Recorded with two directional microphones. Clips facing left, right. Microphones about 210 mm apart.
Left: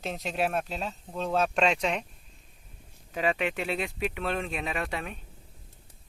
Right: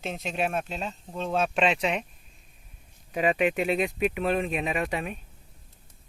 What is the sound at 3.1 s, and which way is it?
Speech, 15° right (ahead or behind).